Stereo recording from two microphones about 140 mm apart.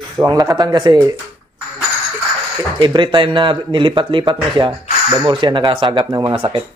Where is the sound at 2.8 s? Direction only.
35° right (ahead or behind).